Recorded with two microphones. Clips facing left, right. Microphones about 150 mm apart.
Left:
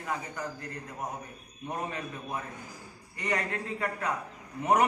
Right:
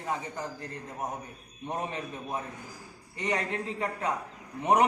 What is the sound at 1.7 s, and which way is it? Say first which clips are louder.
A man's voice: right 1 dB; 25° right (ahead or behind).